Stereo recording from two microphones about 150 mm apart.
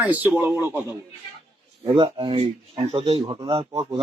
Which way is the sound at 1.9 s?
35° right (ahead or behind).